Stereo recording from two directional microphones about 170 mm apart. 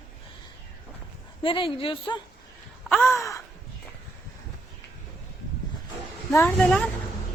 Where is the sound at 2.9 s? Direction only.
15° left (ahead or behind).